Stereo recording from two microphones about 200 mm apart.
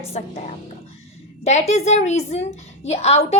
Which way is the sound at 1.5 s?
35° left (ahead or behind).